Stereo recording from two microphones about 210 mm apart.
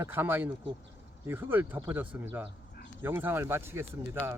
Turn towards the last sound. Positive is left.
turn(degrees=-10)  # may be behind; listen again after turning